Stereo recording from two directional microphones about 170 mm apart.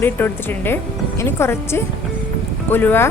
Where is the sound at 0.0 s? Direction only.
10° left (ahead or behind).